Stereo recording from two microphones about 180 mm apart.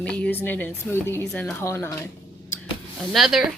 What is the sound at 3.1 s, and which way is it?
Speech, centre (ahead or behind).